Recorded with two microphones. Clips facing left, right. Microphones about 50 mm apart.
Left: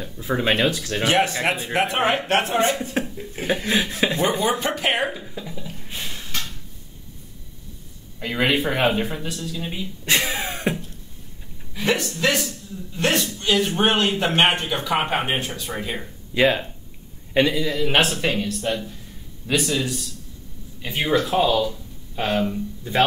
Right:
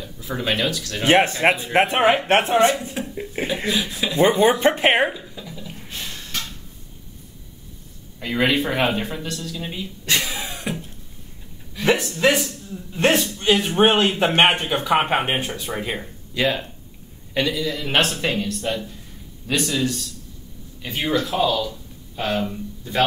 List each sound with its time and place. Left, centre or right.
0.0 s speech: left
1.0 s speech: right
2.0 s a man's voice: centre
2.2 s a man's voice: right
2.8 s a man's voice: left
4.2 s speech: right
5.1 s a sound: centre
8.2 s speech: centre
10.0 s a sound: left
11.8 s a man's voice: centre
16.3 s speech: left
17.7 s a man's voice: centre
21.4 s speech: centre